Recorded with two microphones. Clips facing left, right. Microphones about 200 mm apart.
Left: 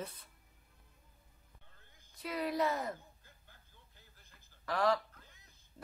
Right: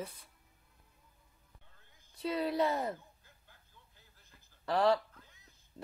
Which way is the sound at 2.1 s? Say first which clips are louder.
Right 3 dB; 30° right (ahead or behind).